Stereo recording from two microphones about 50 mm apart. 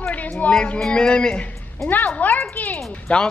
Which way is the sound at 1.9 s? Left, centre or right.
Left.